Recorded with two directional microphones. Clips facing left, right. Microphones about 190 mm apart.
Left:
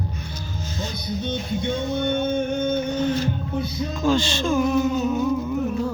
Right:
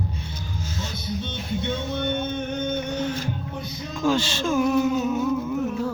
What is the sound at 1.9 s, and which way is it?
Music, 45° left (ahead or behind).